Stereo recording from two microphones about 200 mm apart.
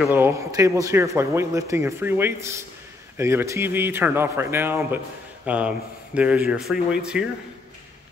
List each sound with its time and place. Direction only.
0.0 s speech: 10° right (ahead or behind)